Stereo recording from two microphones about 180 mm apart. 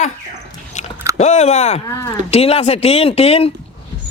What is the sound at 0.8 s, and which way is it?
Biting, 40° left (ahead or behind).